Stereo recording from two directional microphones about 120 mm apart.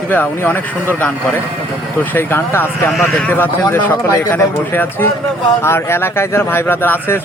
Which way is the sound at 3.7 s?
25° left (ahead or behind).